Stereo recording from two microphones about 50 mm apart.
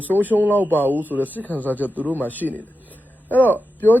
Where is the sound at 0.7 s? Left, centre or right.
Right.